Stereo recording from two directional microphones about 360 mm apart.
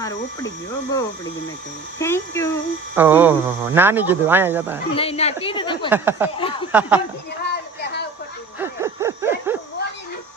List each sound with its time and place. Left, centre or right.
0.0 s speech: centre
2.9 s speech: centre
4.9 s speech: centre
5.9 s speech: centre
7.4 s music: left
8.5 s a sound: centre